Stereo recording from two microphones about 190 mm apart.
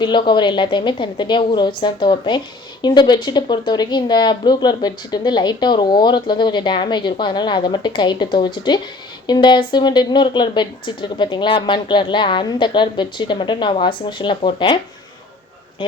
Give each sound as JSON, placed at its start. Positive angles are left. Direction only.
{"t": 0.0, "sound": "a woman's voice", "side_deg": 25}